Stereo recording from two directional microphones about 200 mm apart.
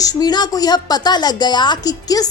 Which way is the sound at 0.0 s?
20° left (ahead or behind).